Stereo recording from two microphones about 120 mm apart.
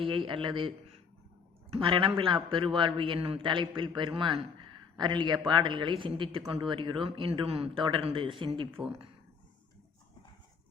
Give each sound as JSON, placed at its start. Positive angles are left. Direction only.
{"t": 0.0, "sound": "a man's voice", "side_deg": -45}